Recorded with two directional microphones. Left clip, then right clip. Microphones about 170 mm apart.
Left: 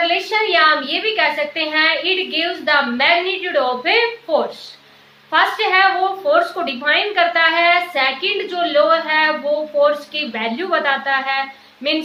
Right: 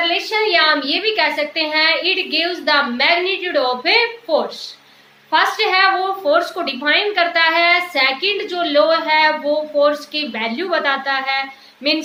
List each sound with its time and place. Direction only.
0.1 s a woman's voice: 20° right (ahead or behind)